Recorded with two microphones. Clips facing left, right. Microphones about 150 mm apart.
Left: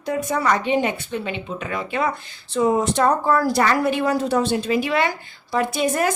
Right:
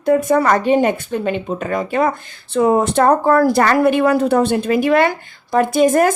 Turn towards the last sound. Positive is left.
turn(degrees=-50)  # may be behind; listen again after turning